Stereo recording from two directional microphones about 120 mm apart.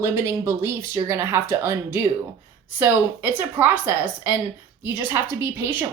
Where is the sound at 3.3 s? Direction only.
15° right (ahead or behind).